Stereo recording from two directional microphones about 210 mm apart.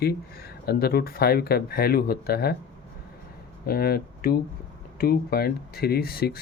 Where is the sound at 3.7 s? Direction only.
45° left (ahead or behind).